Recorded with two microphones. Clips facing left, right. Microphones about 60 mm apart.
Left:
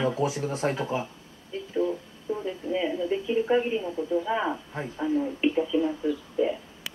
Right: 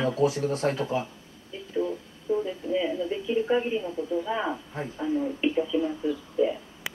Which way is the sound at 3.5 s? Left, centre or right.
Left.